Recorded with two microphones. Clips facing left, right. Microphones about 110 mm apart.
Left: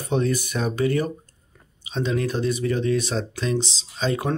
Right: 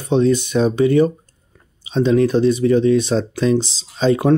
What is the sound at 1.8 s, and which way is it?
Speech, 35° right (ahead or behind).